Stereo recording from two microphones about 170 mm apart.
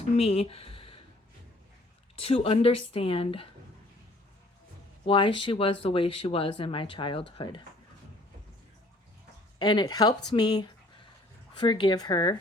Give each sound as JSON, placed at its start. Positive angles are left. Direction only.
{"t": 0.2, "sound": "speech", "side_deg": 35}
{"t": 2.1, "sound": "speech", "side_deg": 35}
{"t": 5.0, "sound": "speech", "side_deg": 30}
{"t": 9.6, "sound": "speech", "side_deg": 25}